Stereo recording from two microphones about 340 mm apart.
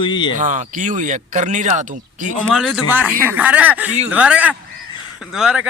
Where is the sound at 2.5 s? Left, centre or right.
Centre.